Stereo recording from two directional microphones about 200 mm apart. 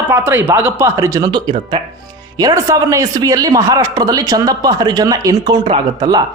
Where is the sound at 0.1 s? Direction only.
10° right (ahead or behind).